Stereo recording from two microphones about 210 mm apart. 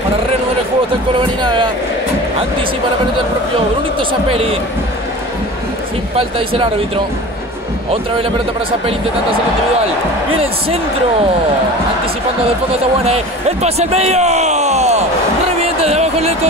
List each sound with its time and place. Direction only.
4.1 s speech: 25° right (ahead or behind)
6.1 s speech: 25° right (ahead or behind)
13.0 s speech: 30° right (ahead or behind)
15.6 s a sound: 30° right (ahead or behind)